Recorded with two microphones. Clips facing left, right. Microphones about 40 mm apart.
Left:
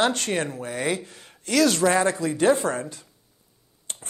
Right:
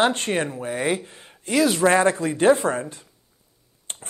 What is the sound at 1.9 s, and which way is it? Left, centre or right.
A man's voice, right.